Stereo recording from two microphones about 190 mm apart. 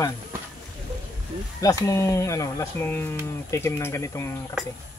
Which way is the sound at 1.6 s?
15° left (ahead or behind).